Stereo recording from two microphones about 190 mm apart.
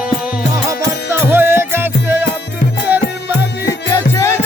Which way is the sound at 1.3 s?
10° right (ahead or behind).